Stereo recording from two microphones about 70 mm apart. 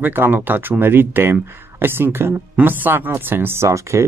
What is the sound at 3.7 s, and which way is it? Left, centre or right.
Speech, right.